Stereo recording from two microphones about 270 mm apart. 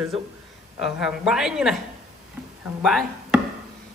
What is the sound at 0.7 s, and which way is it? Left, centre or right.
Speech, centre.